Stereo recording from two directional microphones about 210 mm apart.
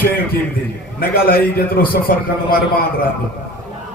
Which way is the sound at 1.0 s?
45° left (ahead or behind).